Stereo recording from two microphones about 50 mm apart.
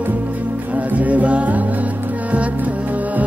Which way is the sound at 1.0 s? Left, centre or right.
Right.